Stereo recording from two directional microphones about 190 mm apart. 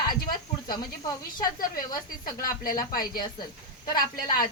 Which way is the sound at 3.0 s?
20° left (ahead or behind).